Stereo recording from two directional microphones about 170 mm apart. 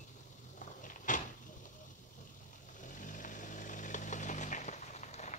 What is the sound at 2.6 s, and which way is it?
Vehicle, 50° left (ahead or behind).